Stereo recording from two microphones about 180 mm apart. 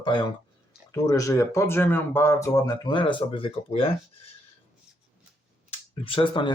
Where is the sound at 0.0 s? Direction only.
25° left (ahead or behind).